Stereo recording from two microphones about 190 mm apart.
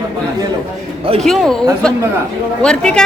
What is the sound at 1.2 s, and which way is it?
Speech, centre (ahead or behind).